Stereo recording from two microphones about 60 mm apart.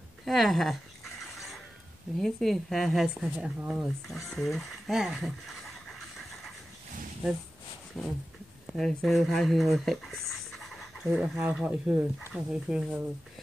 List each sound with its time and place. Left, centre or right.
0.2 s a sound: centre
2.1 s speech: centre
3.2 s speech: centre
3.7 s speech: centre
4.3 s pant: centre
8.0 s speech: centre
11.1 s speech: centre
11.6 s speech: centre